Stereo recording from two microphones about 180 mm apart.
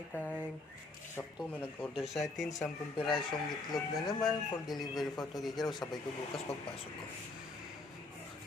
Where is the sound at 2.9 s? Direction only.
25° left (ahead or behind).